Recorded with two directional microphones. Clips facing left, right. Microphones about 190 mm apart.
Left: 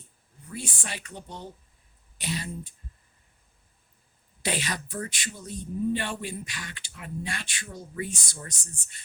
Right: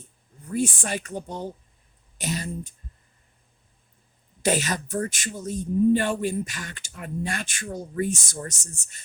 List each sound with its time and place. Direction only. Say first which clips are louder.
0.5 s a man's voice: right 11 dB; 50° right (ahead or behind)
4.4 s a man's voice: right 7 dB; 45° right (ahead or behind)